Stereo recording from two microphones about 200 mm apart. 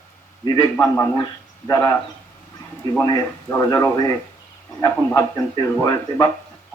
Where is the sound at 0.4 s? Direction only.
20° left (ahead or behind).